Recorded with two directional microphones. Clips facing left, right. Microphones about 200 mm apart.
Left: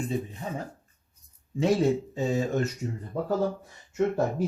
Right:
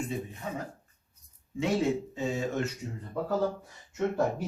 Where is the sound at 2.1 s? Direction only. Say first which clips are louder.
Left 4 dB; 35° left (ahead or behind).